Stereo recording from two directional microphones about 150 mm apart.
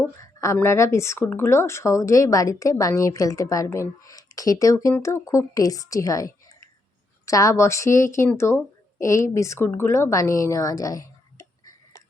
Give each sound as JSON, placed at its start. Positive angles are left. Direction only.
{"t": 0.2, "sound": "a woman's voice", "side_deg": 20}